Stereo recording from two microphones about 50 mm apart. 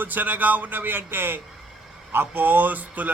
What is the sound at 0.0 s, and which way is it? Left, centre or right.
A man's voice, right.